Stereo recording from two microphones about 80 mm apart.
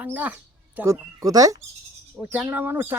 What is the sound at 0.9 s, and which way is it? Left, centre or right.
Speech, right.